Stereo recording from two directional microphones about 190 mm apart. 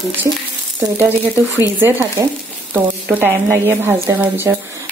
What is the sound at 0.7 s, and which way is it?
Speech, 10° right (ahead or behind).